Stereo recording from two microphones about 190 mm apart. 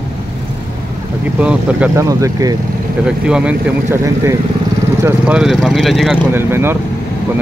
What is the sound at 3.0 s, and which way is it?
Speech, 5° right (ahead or behind).